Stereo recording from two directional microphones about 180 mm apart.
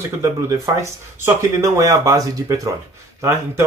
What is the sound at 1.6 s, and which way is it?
Speech, 20° right (ahead or behind).